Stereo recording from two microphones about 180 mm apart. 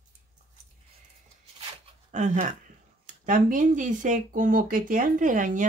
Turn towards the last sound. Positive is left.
turn(degrees=-45)  # may be behind; listen again after turning